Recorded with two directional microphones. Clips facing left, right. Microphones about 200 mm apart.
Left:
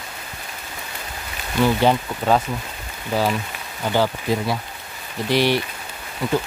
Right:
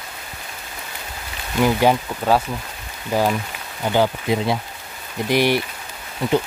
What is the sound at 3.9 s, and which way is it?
Speech, 15° right (ahead or behind).